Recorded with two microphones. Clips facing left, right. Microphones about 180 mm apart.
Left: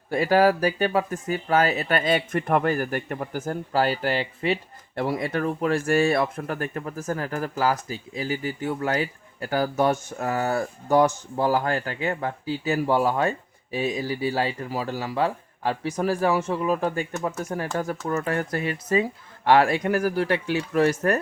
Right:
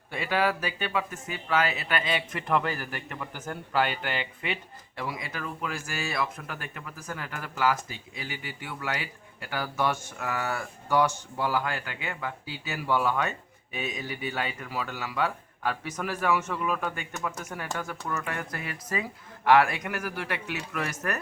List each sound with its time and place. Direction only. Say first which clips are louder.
0.1 s speech: left 8 dB; 40° left (ahead or behind)
3.4 s speech: left 3 dB; 35° left (ahead or behind)
4.9 s speech: left 10 dB; 60° left (ahead or behind)
6.3 s speech: left 10 dB; 45° left (ahead or behind)